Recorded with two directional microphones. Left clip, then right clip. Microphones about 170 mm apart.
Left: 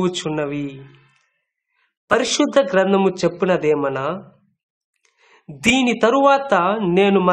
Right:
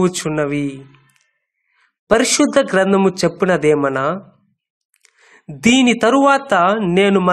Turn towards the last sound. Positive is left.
turn(degrees=-20)  # may be behind; listen again after turning